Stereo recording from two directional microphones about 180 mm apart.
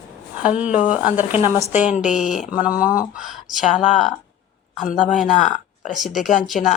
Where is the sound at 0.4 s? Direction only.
5° right (ahead or behind).